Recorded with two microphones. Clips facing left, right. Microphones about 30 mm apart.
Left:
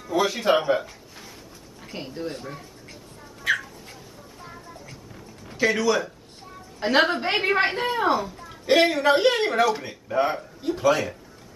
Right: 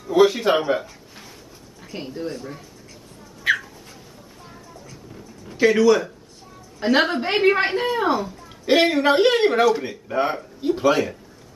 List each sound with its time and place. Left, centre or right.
0.1 s speech: centre
2.0 s a woman's voice: centre
3.4 s cat: right
5.6 s a woman's voice: centre
8.6 s speech: centre